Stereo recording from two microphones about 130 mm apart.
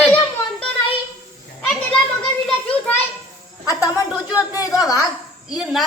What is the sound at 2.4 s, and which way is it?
Children playing, 10° left (ahead or behind).